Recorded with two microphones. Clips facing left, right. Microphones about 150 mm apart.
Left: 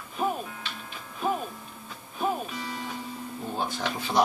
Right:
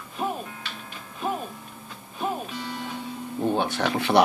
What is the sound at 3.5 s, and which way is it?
Music, 70° right (ahead or behind).